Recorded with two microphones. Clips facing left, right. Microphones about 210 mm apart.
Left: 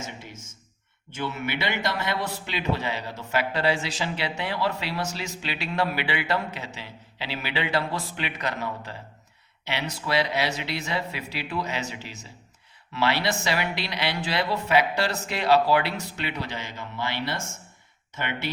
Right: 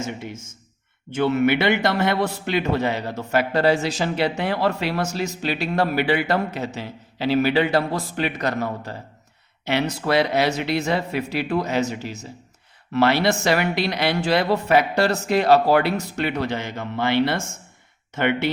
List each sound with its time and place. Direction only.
1.1 s speech: 65° right (ahead or behind)